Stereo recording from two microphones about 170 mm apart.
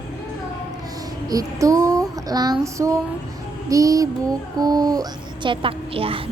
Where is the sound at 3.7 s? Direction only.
20° right (ahead or behind).